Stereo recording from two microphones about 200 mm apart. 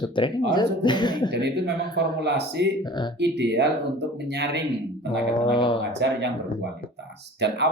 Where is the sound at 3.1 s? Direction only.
60° right (ahead or behind).